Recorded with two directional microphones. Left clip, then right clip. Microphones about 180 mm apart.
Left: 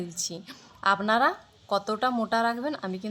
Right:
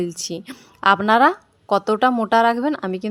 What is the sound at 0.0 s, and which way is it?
Speech, 35° right (ahead or behind).